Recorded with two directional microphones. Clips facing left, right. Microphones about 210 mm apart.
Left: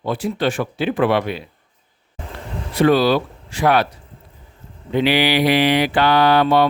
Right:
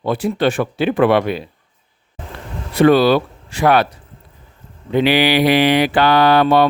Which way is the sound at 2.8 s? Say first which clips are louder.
Right 3 dB; 60° right (ahead or behind).